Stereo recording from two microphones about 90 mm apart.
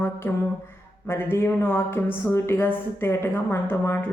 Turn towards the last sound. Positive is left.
turn(degrees=25)  # may be behind; listen again after turning